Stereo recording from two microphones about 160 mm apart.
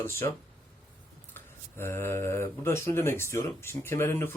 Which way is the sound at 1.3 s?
15° left (ahead or behind).